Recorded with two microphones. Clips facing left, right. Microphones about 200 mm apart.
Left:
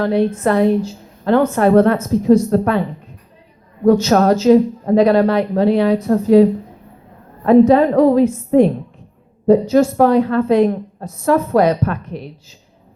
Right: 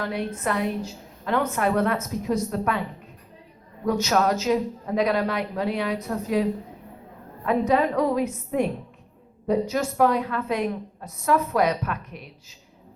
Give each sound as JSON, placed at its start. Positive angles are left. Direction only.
{"t": 0.0, "sound": "a woman's voice", "side_deg": 30}
{"t": 3.8, "sound": "a woman's voice", "side_deg": 30}
{"t": 9.5, "sound": "a woman's voice", "side_deg": 30}